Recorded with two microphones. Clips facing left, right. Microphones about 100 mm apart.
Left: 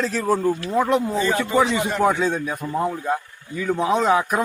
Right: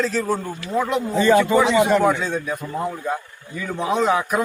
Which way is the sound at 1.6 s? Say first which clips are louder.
Right 7 dB; 90° right.